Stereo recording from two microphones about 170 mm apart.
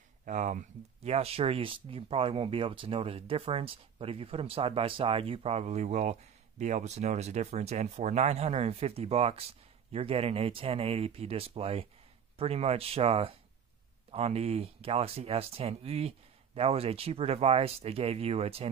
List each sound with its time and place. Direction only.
0.2 s speech: 45° right (ahead or behind)